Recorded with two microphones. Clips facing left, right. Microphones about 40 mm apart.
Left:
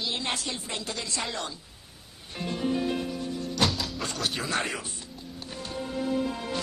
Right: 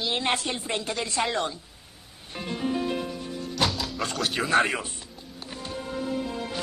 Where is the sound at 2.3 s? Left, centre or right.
Centre.